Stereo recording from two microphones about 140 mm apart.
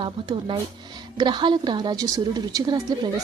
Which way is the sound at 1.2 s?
30° right (ahead or behind).